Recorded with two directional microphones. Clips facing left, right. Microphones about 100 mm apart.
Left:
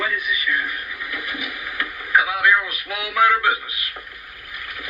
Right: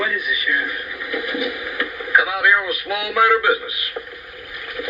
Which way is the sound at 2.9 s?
25° right (ahead or behind).